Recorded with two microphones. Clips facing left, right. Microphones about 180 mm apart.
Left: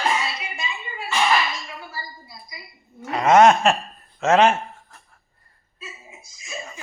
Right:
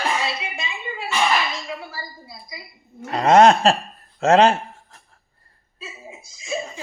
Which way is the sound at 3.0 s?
35° right (ahead or behind).